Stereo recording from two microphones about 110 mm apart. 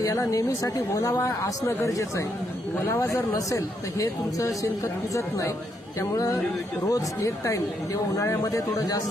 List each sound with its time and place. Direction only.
0.0 s a woman's voice: 30° left (ahead or behind)